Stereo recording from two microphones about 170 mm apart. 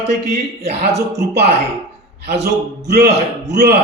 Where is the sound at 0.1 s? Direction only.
70° right (ahead or behind).